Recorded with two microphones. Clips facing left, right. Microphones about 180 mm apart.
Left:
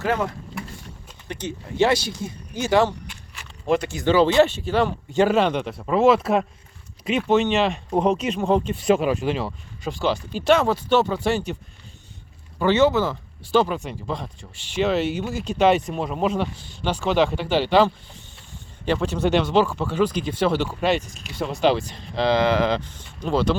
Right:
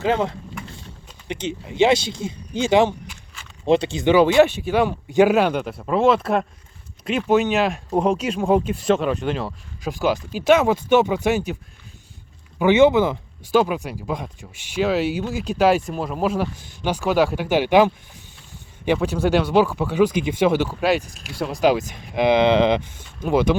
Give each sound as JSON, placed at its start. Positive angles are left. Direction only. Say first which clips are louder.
{"t": 0.0, "sound": "speech", "louder": "right 3 dB", "side_deg": -20}
{"t": 1.3, "sound": "speech", "louder": "right 3 dB", "side_deg": -20}
{"t": 12.5, "sound": "speech", "louder": "right 4 dB", "side_deg": -15}
{"t": 18.9, "sound": "speech", "louder": "even", "side_deg": -10}
{"t": 22.9, "sound": "speech", "louder": "right 3 dB", "side_deg": -10}